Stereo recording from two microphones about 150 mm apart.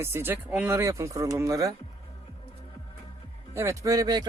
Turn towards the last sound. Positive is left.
turn(degrees=-25)  # may be behind; listen again after turning